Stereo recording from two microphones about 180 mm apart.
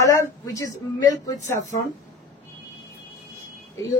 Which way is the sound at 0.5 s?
20° left (ahead or behind).